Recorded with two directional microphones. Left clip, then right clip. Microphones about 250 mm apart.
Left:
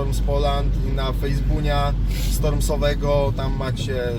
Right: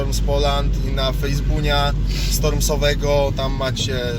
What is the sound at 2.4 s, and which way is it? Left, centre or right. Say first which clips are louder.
Speech: right 2 dB; centre.